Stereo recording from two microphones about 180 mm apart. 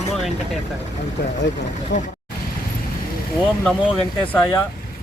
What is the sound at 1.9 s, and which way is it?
Speech, 75° left (ahead or behind).